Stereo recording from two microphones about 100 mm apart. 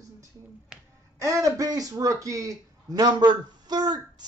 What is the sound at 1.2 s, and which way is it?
A man's voice, 30° right (ahead or behind).